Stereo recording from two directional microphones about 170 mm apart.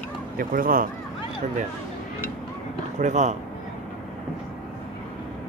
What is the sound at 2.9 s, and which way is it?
Speech, 45° right (ahead or behind).